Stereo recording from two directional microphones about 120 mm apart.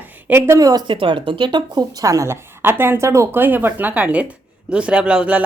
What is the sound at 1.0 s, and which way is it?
A woman's voice, 45° right (ahead or behind).